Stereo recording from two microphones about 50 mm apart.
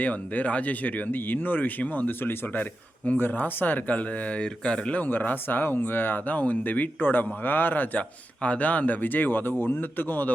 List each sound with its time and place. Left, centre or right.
0.0 s speech: left
7.9 s speech: left